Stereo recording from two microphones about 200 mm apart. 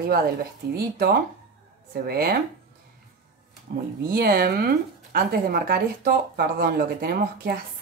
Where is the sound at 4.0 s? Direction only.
50° right (ahead or behind).